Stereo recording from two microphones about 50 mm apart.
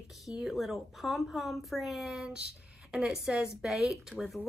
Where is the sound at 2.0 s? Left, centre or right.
Centre.